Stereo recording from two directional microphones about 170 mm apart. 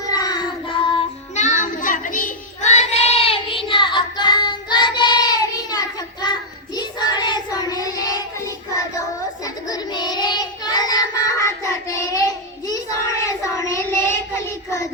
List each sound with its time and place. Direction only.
0.0 s child singing: 20° left (ahead or behind)
1.4 s child singing: 45° left (ahead or behind); by 14.8 s 15° left (ahead or behind)